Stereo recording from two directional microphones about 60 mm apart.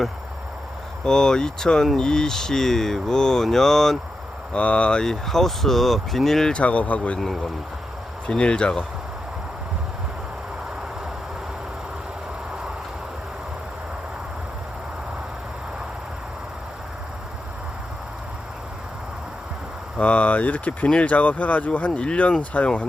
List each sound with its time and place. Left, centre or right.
1.0 s speech: centre
4.5 s speech: centre
6.5 s speech: left
7.2 s speech: centre
8.3 s speech: centre
20.0 s speech: left